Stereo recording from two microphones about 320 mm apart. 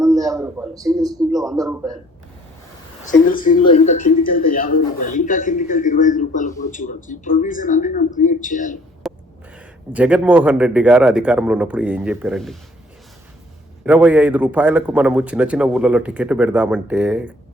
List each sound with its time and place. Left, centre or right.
0.0 s a sound: centre
1.3 s a man's voice: centre
1.5 s a man's voice: centre
3.0 s speech: left
9.0 s a sound: centre
9.6 s a man's voice: centre
13.8 s a man's voice: centre